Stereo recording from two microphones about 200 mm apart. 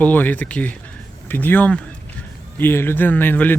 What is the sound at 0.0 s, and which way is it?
Speech, 10° left (ahead or behind).